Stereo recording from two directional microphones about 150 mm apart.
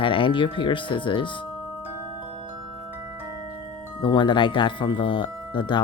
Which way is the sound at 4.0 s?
30° left (ahead or behind).